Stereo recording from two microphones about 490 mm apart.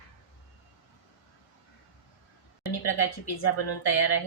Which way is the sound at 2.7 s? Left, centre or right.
Left.